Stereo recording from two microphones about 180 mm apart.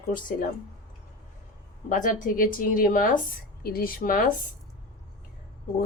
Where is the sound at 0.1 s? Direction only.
50° left (ahead or behind).